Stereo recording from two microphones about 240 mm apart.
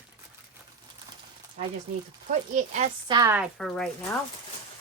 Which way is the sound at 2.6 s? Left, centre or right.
Right.